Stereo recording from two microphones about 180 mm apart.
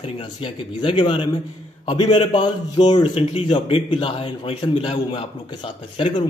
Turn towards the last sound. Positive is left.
turn(degrees=30)  # may be behind; listen again after turning